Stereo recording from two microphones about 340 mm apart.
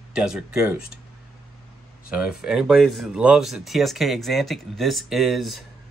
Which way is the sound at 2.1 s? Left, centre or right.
Centre.